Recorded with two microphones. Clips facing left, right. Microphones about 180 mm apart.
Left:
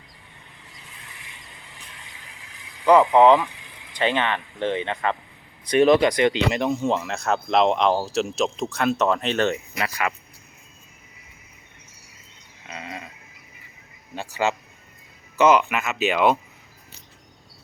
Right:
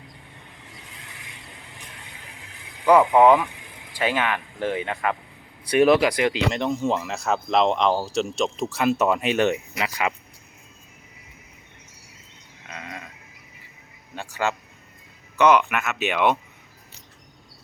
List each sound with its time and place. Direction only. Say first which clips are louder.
3.2 s speech: left 1 dB; 20° left (ahead or behind)
3.9 s speech: left 1 dB; 5° right (ahead or behind)
12.6 s sheep: left 2 dB; 5° left (ahead or behind)
14.2 s speech: left 2 dB; 10° left (ahead or behind)